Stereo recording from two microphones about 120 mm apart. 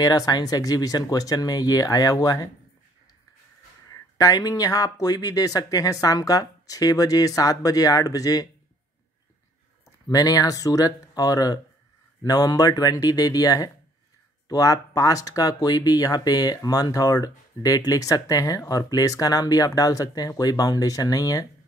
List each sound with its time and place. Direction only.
0.0 s speech: 30° left (ahead or behind)
4.2 s speech: 30° left (ahead or behind)
10.0 s speech: 30° left (ahead or behind)